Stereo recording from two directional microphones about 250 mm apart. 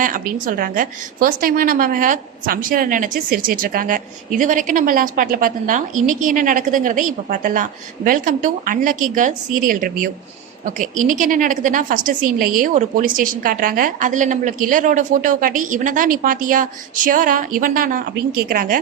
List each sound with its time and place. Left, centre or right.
0.0 s a woman's voice: right